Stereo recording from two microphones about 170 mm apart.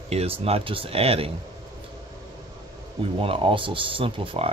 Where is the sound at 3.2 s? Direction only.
30° right (ahead or behind).